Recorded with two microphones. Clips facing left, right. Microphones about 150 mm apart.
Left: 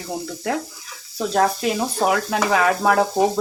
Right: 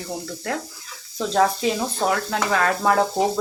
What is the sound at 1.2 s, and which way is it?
Speech, 5° left (ahead or behind).